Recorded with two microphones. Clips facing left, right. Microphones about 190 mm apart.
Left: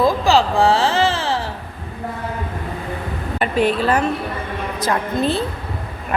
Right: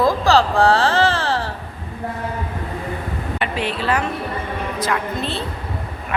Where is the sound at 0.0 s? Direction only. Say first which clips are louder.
Even; 20° left (ahead or behind).